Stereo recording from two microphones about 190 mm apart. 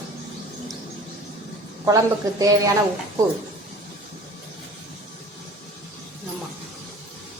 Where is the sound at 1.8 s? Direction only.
20° right (ahead or behind).